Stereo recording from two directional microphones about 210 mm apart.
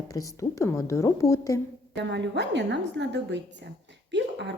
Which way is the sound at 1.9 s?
55° right (ahead or behind).